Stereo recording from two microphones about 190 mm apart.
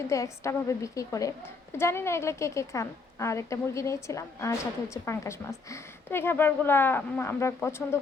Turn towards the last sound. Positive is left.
turn(degrees=15)  # may be behind; listen again after turning